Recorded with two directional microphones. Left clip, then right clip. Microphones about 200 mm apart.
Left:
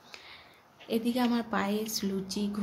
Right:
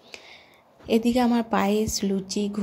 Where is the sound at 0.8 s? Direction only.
30° right (ahead or behind).